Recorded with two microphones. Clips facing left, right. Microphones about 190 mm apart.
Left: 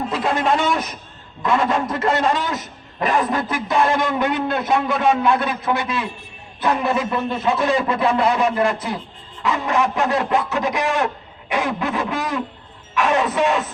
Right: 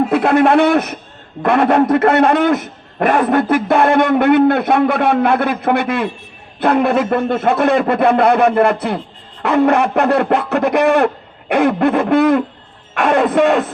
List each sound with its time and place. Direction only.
0.1 s a man's voice: 60° right (ahead or behind)